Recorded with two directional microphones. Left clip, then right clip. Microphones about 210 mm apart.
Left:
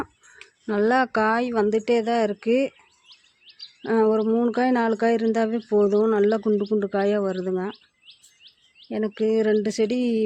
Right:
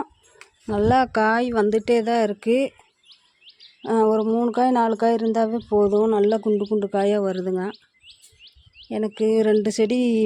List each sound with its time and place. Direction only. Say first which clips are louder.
0.0 s speech: right 1 dB; 5° right (ahead or behind)
3.8 s speech: right 1 dB; 5° right (ahead or behind)
8.0 s bird: right 2 dB; 40° right (ahead or behind)
8.9 s speech: right 2 dB; 10° right (ahead or behind)